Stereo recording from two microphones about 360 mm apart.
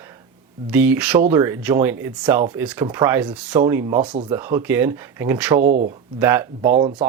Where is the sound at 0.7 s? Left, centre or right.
Centre.